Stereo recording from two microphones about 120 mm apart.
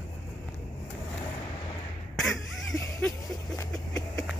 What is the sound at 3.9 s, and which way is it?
Vehicle, 5° left (ahead or behind).